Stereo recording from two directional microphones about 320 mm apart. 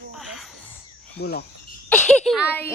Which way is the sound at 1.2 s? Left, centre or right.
Left.